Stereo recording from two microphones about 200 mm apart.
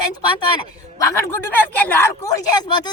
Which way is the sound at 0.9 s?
15° left (ahead or behind).